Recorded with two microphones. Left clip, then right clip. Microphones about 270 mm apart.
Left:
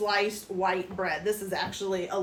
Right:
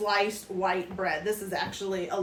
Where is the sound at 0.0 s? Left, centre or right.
Centre.